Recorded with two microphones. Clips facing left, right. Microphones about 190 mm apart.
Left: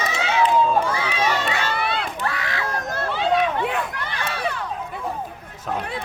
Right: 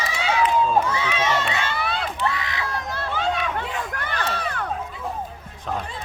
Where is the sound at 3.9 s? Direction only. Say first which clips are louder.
Right 1 dB; 50° right (ahead or behind).